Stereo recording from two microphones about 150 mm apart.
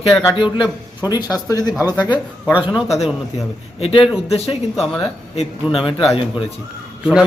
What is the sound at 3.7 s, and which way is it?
Speech, 40° left (ahead or behind).